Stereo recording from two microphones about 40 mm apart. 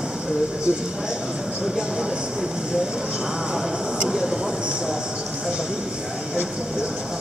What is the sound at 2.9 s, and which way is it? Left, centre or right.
Speech, centre.